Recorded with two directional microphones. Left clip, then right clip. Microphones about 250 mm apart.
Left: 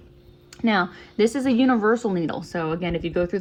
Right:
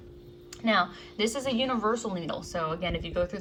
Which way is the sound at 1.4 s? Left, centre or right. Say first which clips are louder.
Left 7 dB; left.